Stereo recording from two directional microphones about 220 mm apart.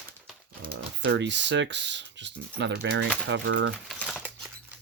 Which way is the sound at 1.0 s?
55° right (ahead or behind).